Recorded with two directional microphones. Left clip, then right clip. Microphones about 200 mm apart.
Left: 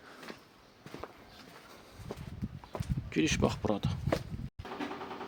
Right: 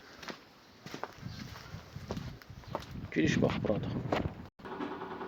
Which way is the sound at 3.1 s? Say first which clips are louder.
Even; 30° left (ahead or behind).